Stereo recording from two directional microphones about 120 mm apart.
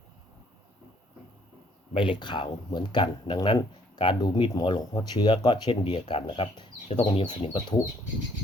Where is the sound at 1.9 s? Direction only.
40° left (ahead or behind).